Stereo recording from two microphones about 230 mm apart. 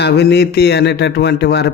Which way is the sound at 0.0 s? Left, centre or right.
Left.